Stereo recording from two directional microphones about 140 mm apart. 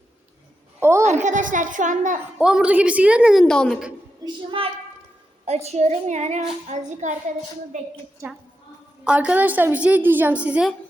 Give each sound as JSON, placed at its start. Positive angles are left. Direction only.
{"t": 0.8, "sound": "a sound", "side_deg": -20}
{"t": 1.2, "sound": "a woman's voice", "side_deg": -65}
{"t": 2.4, "sound": "a woman's voice", "side_deg": -5}
{"t": 3.4, "sound": "a woman's voice", "side_deg": 5}
{"t": 4.6, "sound": "a woman's voice", "side_deg": -40}
{"t": 9.0, "sound": "a woman's voice", "side_deg": -10}